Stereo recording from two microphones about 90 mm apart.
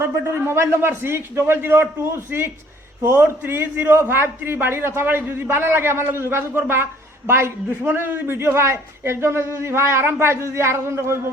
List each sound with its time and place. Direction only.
0.3 s a man's voice: 30° right (ahead or behind)